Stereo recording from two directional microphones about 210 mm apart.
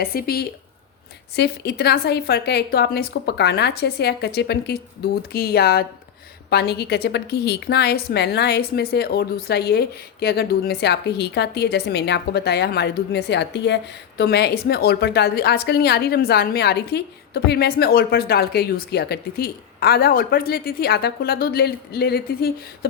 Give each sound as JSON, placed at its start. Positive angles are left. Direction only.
{"t": 0.0, "sound": "a woman's voice", "side_deg": 45}